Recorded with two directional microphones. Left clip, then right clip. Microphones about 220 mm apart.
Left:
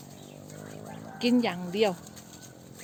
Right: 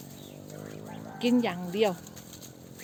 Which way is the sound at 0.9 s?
10° left (ahead or behind).